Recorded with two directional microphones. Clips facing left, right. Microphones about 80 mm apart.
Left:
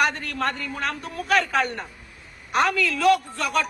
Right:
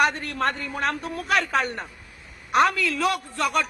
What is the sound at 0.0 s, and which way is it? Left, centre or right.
Speech, right.